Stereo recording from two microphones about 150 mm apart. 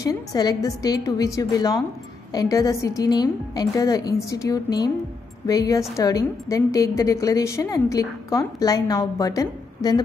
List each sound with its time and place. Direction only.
0.0 s a woman's voice: 25° left (ahead or behind)